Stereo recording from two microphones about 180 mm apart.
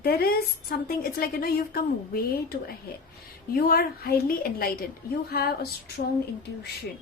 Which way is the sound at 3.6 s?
55° left (ahead or behind).